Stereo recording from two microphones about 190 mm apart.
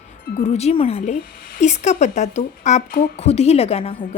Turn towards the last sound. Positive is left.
turn(degrees=30)  # may be behind; listen again after turning